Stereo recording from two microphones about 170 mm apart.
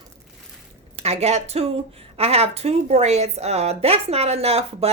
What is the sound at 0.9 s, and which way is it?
A woman's voice, 40° right (ahead or behind).